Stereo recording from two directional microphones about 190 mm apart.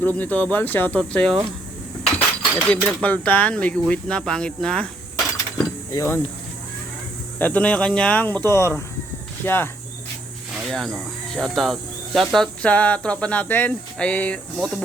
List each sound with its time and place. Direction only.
0.0 s speech: 10° left (ahead or behind)
5.9 s speech: 15° left (ahead or behind)
7.3 s speech: 10° left (ahead or behind)
10.5 s speech: centre (ahead or behind)